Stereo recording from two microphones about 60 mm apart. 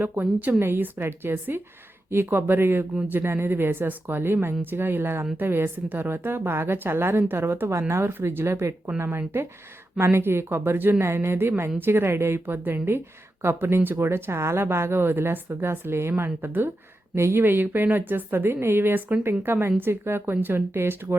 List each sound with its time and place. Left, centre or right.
0.0 s a woman's voice: right